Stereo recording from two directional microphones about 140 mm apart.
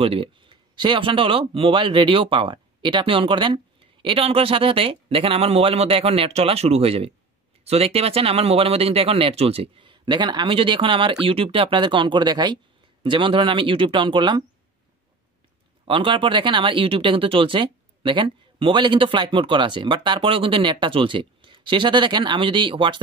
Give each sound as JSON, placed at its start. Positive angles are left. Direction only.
{"t": 0.0, "sound": "speech", "side_deg": -40}
{"t": 15.8, "sound": "speech", "side_deg": -40}